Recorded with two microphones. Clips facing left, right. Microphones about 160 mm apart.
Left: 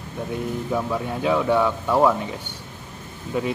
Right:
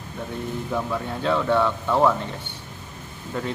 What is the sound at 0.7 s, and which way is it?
A man's voice, 10° left (ahead or behind).